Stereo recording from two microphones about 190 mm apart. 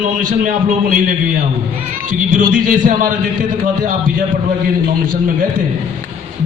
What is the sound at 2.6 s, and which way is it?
Speech, 45° right (ahead or behind).